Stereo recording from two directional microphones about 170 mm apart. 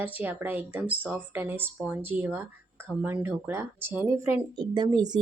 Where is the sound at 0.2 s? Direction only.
10° right (ahead or behind).